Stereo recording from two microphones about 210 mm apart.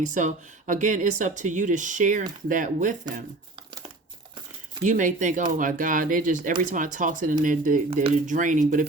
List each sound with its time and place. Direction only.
0.0 s speech: 35° right (ahead or behind)
4.8 s speech: 40° right (ahead or behind)